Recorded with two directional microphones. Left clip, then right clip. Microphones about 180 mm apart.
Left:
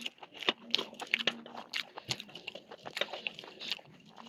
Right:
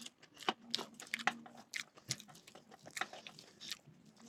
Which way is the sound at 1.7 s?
20° left (ahead or behind).